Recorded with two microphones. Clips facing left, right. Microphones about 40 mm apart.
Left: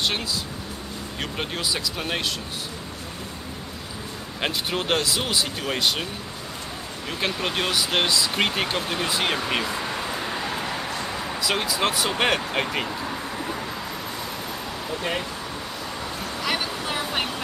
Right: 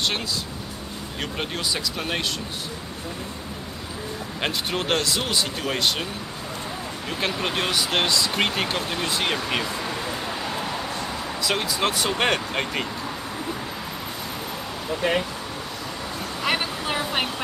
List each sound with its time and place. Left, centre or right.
1.4 s speech: centre
4.4 s speech: centre
7.2 s speech: centre
14.9 s speech: centre
16.4 s vehicle: centre